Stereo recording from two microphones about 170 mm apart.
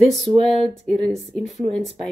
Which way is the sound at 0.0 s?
Centre (ahead or behind).